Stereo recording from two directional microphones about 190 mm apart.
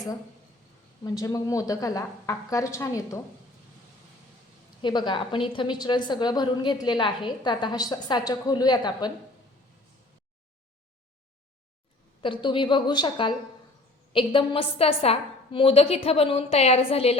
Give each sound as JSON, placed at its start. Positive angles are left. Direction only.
{"t": 1.0, "sound": "a woman's voice", "side_deg": 20}
{"t": 4.8, "sound": "a woman's voice", "side_deg": 25}
{"t": 12.2, "sound": "a woman's voice", "side_deg": 25}